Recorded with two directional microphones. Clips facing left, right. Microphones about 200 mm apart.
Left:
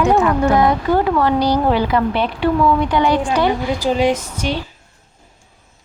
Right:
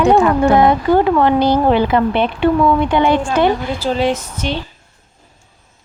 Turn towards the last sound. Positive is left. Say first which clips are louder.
# even
turn(degrees=10)  # may be behind; listen again after turning